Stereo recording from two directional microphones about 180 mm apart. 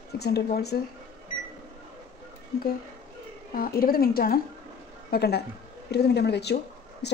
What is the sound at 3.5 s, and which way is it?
A woman's voice, 55° left (ahead or behind).